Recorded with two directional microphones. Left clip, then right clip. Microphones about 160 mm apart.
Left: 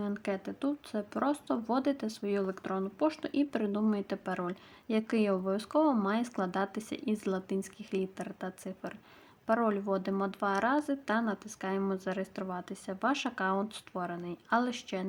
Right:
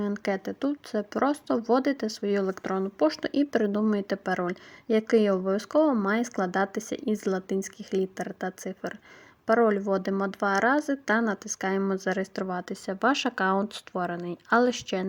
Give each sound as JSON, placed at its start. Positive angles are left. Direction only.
{"t": 0.0, "sound": "speech", "side_deg": -30}